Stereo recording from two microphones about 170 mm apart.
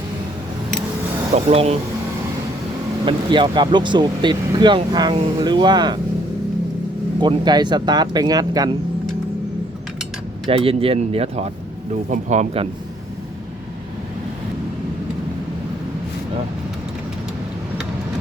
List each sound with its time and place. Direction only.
1.5 s speech: 35° right (ahead or behind)
3.1 s speech: 30° right (ahead or behind)
7.2 s speech: 25° right (ahead or behind)
10.6 s speech: 35° right (ahead or behind)